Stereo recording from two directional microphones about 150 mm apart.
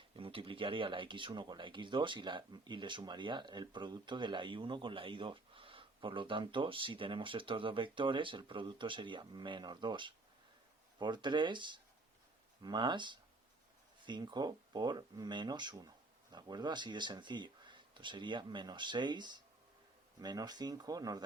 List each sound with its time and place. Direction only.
0.1 s speech: 35° right (ahead or behind)